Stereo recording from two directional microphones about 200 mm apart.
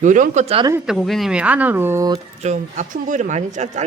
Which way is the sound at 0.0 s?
40° right (ahead or behind).